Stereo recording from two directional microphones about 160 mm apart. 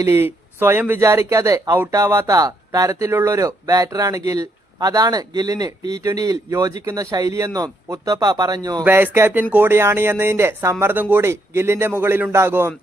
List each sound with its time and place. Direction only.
0.0 s speech: 15° right (ahead or behind)
8.8 s speech: 15° right (ahead or behind)